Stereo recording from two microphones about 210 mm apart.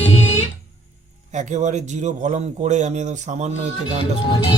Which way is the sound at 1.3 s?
35° right (ahead or behind).